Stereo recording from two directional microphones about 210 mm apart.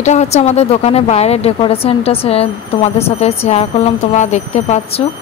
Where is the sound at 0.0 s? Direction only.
35° left (ahead or behind).